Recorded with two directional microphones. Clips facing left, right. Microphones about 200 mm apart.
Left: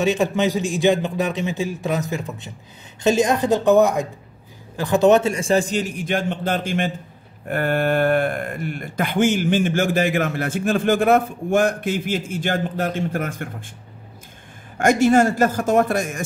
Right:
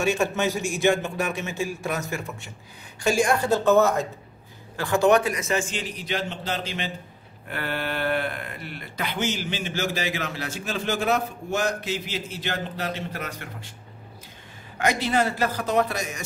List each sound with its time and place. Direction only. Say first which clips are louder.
0.0 s a man's voice: left 4 dB; 15° left (ahead or behind); by 13.7 s 50° left (ahead or behind)
14.8 s speech: left 8 dB; 50° left (ahead or behind)